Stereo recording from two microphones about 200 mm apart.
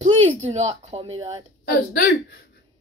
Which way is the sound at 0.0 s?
30° right (ahead or behind).